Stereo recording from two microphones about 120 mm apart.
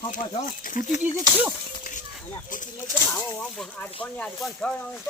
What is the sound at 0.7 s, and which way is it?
Speech, 90° left.